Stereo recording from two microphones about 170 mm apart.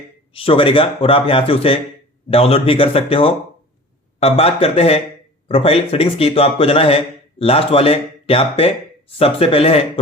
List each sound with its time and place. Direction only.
0.3 s speech: 30° left (ahead or behind)